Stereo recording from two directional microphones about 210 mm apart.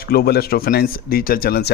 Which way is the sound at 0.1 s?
50° left (ahead or behind).